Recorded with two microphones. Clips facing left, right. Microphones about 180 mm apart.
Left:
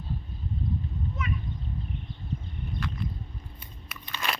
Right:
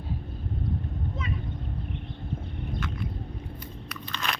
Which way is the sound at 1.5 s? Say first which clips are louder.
Right 1 dB; 60° right (ahead or behind).